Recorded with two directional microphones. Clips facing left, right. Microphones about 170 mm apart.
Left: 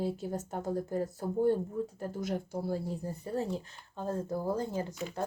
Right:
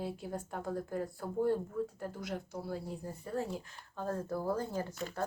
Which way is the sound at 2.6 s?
30° left (ahead or behind).